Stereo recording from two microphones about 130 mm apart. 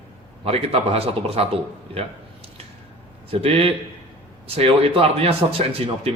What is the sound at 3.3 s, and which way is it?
Speech, 45° right (ahead or behind).